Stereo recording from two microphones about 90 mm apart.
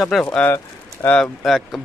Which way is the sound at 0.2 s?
15° left (ahead or behind).